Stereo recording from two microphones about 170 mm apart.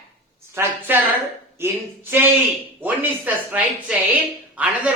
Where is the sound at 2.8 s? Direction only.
10° right (ahead or behind).